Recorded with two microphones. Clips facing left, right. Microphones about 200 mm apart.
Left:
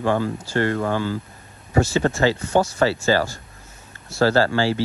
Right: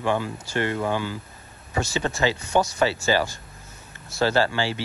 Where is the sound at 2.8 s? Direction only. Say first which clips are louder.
Left 3 dB; 15° right (ahead or behind).